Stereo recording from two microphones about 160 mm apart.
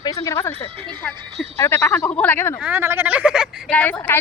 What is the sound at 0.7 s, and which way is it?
Speech, 30° right (ahead or behind).